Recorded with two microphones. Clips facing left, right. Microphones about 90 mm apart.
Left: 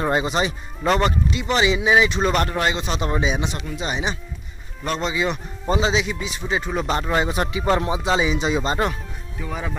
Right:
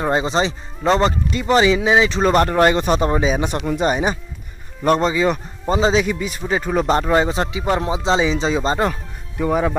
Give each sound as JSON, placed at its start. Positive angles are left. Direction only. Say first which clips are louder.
{"t": 0.0, "sound": "speech", "louder": "right 3 dB", "side_deg": -30}
{"t": 1.3, "sound": "speech", "louder": "right 5 dB", "side_deg": -40}